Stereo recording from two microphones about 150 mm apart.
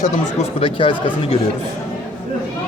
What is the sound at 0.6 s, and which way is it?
Speech, 35° left (ahead or behind).